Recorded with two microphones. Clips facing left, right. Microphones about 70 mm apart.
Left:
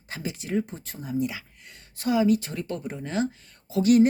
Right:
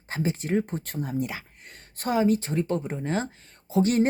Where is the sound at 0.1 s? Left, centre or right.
Right.